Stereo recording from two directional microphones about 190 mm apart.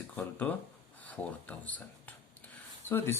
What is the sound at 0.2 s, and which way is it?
Speech, 10° left (ahead or behind).